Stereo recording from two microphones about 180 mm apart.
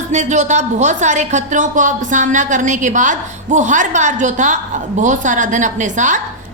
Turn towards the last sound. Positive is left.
turn(degrees=-45)  # may be behind; listen again after turning